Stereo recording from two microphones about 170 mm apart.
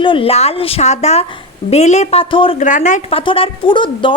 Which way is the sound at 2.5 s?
45° left (ahead or behind).